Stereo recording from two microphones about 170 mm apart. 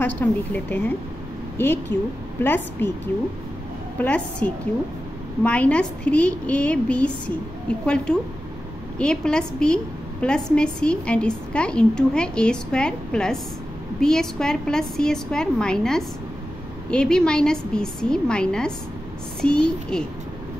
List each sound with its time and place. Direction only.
0.0 s a woman's voice: 10° left (ahead or behind)
4.0 s a woman's voice: 10° left (ahead or behind)